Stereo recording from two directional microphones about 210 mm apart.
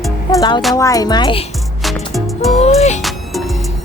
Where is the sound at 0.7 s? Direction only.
15° left (ahead or behind).